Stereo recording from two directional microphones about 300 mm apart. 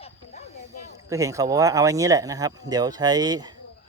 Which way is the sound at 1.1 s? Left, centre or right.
Centre.